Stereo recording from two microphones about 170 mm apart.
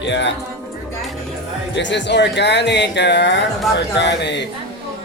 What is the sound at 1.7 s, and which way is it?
Speech, 90° left.